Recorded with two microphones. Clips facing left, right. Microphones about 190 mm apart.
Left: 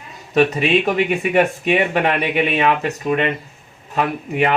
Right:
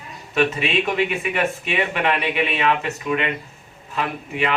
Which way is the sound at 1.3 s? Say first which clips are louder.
Left 7 dB; 40° left (ahead or behind).